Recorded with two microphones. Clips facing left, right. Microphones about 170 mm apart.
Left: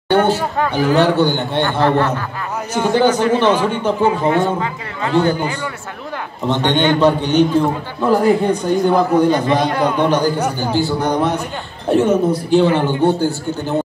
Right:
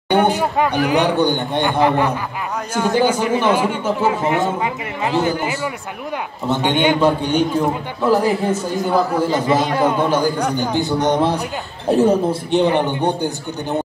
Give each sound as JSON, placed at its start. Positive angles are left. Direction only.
{"t": 0.1, "sound": "speech", "side_deg": -15}
{"t": 5.2, "sound": "a man's voice", "side_deg": 0}
{"t": 6.4, "sound": "a man's voice", "side_deg": -10}
{"t": 9.3, "sound": "a man's voice", "side_deg": -20}
{"t": 10.0, "sound": "speech", "side_deg": -10}
{"t": 10.8, "sound": "a man's voice", "side_deg": -20}
{"t": 11.9, "sound": "speech", "side_deg": -35}
{"t": 12.4, "sound": "speech", "side_deg": -20}